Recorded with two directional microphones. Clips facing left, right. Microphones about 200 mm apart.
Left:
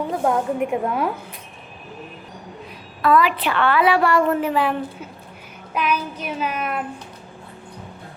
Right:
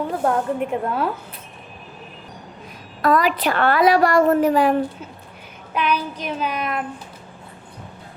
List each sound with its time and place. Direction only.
0.1 s a woman's voice: 10° left (ahead or behind)
3.0 s a woman's voice: 40° right (ahead or behind)
5.7 s a woman's voice: 5° left (ahead or behind)